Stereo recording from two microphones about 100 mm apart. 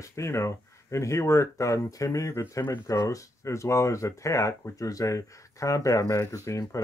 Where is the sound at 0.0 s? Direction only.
30° left (ahead or behind).